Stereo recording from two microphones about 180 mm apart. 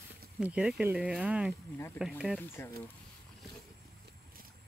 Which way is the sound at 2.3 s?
10° left (ahead or behind).